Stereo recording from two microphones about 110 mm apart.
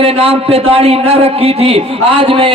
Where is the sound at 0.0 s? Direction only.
65° right (ahead or behind).